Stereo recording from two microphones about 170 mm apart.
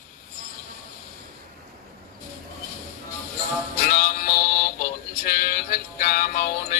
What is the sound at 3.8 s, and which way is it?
Music, 60° left (ahead or behind).